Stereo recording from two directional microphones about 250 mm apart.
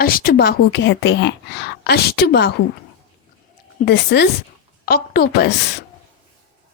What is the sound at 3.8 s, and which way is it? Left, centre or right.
A woman's voice, left.